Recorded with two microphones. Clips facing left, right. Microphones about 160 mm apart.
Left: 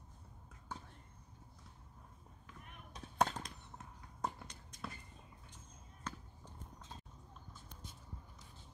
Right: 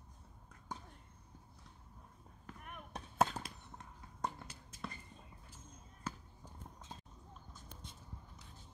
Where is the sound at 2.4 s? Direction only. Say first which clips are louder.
Right 6 dB; 55° right (ahead or behind).